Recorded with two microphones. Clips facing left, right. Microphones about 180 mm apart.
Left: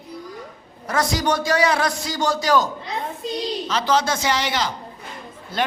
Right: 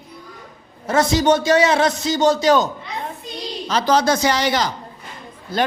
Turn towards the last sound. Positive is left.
turn(degrees=-35)  # may be behind; listen again after turning